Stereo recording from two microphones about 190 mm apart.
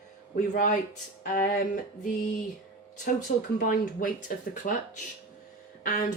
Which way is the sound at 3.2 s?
45° left (ahead or behind).